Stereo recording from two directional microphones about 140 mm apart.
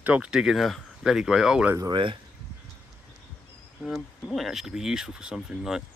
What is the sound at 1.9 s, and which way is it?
Speech, 35° right (ahead or behind).